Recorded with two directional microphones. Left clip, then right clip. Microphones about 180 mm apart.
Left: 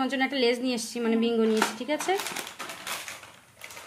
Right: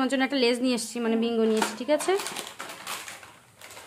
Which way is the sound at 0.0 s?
25° right (ahead or behind).